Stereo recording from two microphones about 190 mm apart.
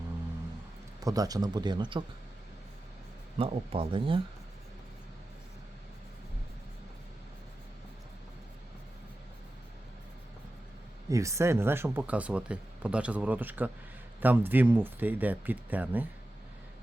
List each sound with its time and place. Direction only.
1.0 s a man's voice: 20° right (ahead or behind)
3.3 s a man's voice: 30° right (ahead or behind)
11.1 s speech: 15° right (ahead or behind)